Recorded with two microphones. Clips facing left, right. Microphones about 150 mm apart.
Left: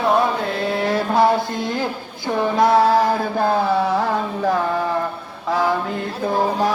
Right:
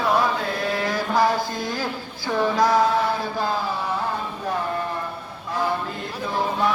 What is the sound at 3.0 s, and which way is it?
Chant, 45° left (ahead or behind).